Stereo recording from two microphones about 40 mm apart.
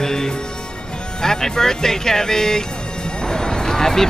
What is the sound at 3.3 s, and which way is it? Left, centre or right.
Music, centre.